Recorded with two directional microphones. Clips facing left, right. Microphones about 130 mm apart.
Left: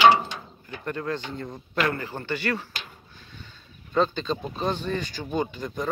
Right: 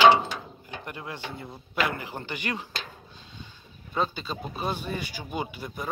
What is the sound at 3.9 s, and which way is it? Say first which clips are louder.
Speech: left 5 dB; 10° right (ahead or behind).